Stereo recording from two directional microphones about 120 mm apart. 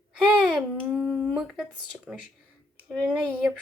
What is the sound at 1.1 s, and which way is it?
Speech, centre (ahead or behind).